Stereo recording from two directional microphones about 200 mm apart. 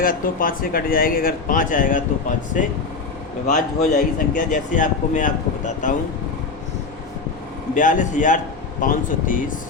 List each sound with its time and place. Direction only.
0.0 s speech: 45° left (ahead or behind)
7.7 s speech: 40° left (ahead or behind)